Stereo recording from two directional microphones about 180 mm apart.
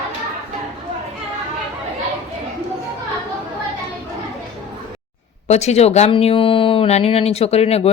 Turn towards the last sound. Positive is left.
turn(degrees=35)  # may be behind; listen again after turning